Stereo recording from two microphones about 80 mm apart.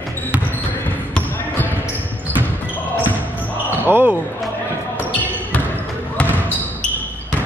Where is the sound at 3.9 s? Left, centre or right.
Right.